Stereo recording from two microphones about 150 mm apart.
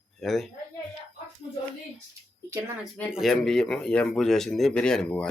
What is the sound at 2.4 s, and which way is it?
Speech, 15° right (ahead or behind).